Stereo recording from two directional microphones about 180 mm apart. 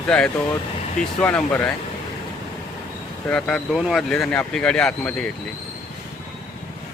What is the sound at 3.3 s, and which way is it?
Speech, 5° left (ahead or behind).